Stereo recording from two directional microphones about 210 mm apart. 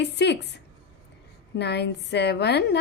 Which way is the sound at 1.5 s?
55° left (ahead or behind).